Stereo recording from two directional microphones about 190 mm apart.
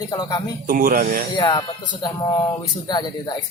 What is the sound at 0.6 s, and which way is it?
Speech, 45° right (ahead or behind).